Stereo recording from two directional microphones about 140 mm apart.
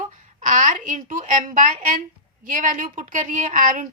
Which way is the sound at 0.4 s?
65° right (ahead or behind).